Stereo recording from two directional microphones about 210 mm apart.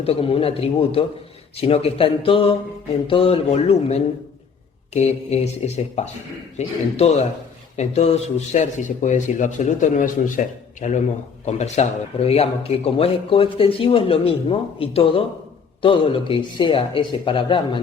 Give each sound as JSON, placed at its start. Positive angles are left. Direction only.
{"t": 0.0, "sound": "speech", "side_deg": 30}